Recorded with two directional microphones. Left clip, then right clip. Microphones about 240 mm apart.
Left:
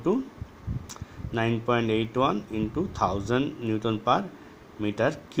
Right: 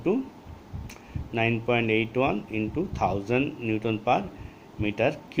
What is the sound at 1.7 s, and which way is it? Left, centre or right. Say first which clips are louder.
Speech: even; left.